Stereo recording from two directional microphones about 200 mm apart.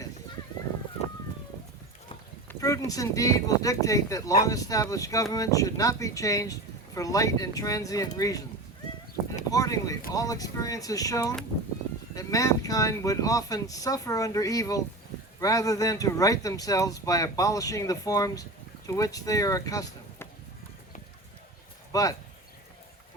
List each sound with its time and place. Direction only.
2.5 s speech: 15° left (ahead or behind)
9.5 s speech: 15° left (ahead or behind)
21.9 s speech: 20° left (ahead or behind)